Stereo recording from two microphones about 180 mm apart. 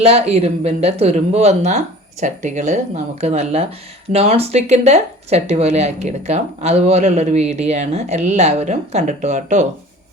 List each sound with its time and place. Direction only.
0.0 s speech: 35° right (ahead or behind)